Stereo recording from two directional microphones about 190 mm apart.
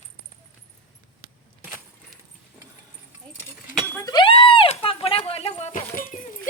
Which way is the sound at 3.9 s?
20° left (ahead or behind).